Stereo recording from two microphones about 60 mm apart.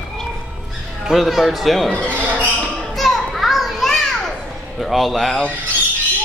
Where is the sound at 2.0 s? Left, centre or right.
Right.